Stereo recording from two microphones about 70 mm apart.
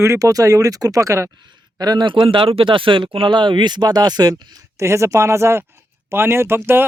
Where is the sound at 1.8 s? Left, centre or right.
Right.